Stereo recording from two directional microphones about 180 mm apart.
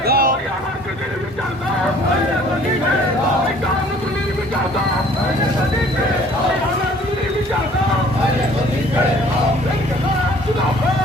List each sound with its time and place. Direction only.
0.0 s vehicle: 55° right (ahead or behind)